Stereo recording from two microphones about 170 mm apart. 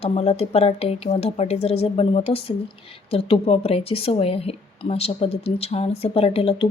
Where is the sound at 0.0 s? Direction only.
40° left (ahead or behind).